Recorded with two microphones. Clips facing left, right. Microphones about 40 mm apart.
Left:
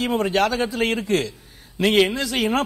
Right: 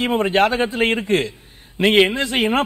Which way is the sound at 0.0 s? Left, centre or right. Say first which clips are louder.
Right 3 dB; right.